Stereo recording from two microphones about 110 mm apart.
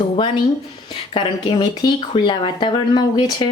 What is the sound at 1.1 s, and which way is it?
A woman's voice, 50° left (ahead or behind).